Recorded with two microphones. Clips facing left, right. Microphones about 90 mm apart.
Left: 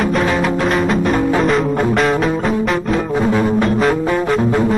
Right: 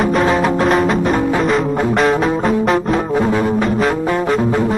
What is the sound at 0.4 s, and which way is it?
Music, 35° right (ahead or behind).